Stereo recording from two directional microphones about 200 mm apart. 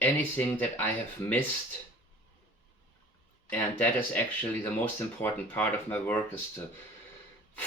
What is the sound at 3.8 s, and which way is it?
Speech, 10° left (ahead or behind).